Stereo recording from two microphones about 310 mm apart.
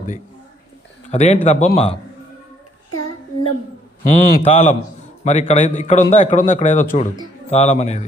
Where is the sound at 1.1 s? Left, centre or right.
Left.